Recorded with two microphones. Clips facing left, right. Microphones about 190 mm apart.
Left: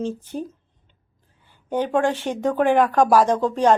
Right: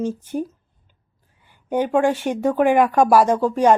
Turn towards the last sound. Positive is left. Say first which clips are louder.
# right 2 dB
turn(degrees=-10)  # may be behind; listen again after turning